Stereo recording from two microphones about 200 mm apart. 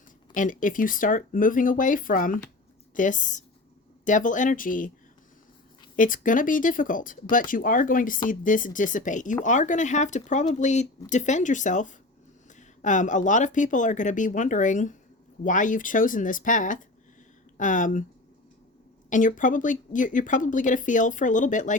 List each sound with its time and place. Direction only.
0.3 s speech: 40° left (ahead or behind)
6.0 s speech: 40° left (ahead or behind)
19.1 s speech: 40° left (ahead or behind)